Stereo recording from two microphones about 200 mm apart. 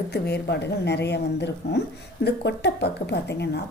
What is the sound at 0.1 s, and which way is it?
A woman's voice, 55° left (ahead or behind).